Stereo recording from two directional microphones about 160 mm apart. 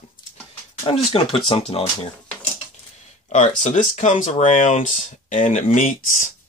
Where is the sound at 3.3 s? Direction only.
50° left (ahead or behind).